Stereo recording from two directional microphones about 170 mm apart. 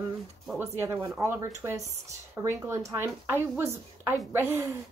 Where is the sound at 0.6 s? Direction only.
15° right (ahead or behind).